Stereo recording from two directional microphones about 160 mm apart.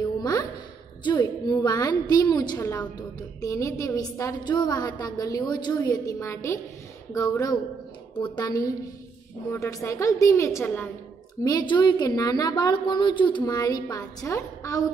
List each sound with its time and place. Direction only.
0.2 s a sound: 25° left (ahead or behind)
1.0 s a woman's voice: 25° left (ahead or behind)
11.4 s a woman's voice: 30° left (ahead or behind)